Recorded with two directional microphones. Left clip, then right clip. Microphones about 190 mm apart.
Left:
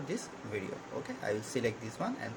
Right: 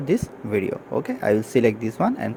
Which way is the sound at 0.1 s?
50° right (ahead or behind).